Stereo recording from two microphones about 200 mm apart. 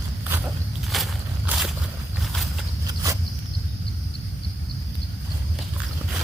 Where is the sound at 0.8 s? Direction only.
Centre (ahead or behind).